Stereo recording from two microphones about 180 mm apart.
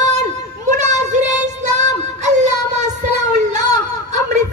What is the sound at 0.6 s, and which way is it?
Child singing, 40° right (ahead or behind).